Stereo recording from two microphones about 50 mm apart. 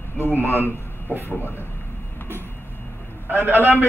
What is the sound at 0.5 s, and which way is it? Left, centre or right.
Speech, right.